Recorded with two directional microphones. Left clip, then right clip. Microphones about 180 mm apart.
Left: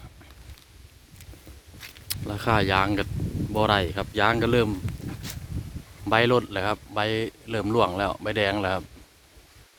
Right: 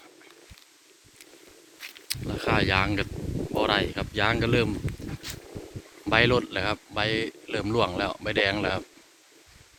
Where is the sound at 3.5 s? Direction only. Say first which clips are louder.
Left 2 dB; 15° left (ahead or behind).